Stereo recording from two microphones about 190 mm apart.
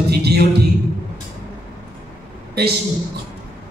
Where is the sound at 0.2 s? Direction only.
55° right (ahead or behind).